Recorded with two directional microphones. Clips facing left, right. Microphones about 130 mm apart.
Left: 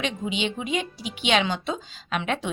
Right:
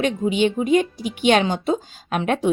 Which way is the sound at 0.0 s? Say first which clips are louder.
Right 8 dB; 50° right (ahead or behind).